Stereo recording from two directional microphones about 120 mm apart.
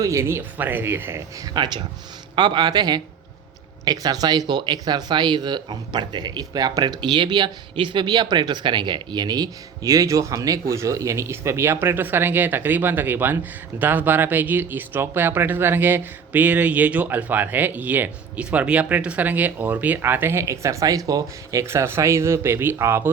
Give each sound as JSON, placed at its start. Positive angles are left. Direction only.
{"t": 0.0, "sound": "speech", "side_deg": -25}
{"t": 1.5, "sound": "a man's voice", "side_deg": -40}